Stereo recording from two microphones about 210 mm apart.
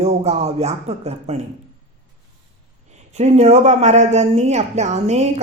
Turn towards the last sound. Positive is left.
turn(degrees=-30)  # may be behind; listen again after turning